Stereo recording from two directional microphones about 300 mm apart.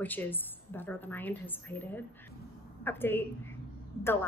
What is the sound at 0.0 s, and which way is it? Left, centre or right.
A woman's voice, centre.